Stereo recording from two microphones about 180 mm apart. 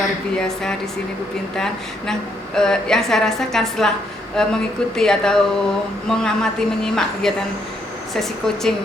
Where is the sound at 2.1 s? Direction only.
5° left (ahead or behind).